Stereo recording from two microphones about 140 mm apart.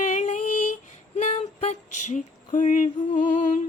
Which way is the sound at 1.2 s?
55° left (ahead or behind).